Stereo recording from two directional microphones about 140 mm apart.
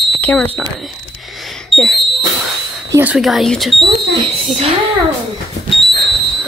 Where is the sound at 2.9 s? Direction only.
15° right (ahead or behind).